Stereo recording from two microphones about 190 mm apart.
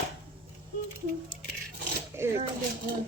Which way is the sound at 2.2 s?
15° right (ahead or behind).